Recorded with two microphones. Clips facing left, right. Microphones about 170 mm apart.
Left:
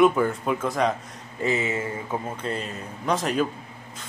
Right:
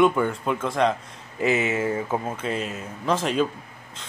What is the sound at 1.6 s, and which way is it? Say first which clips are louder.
Speech: right 4 dB; 20° right (ahead or behind).